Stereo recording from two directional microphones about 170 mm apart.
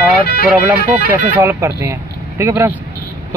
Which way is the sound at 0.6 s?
10° right (ahead or behind).